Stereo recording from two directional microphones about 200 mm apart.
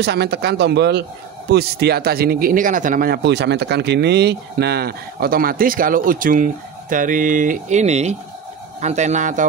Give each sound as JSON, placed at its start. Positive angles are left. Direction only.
{"t": 0.0, "sound": "speech", "side_deg": -55}